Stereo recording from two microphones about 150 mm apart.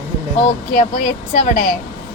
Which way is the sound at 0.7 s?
50° left (ahead or behind).